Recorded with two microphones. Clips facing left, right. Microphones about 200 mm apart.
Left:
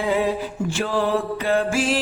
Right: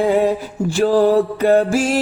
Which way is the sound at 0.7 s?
40° right (ahead or behind).